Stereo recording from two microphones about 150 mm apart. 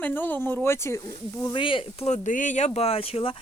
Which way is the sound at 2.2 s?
60° left (ahead or behind).